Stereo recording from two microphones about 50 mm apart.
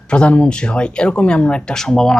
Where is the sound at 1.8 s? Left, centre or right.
Centre.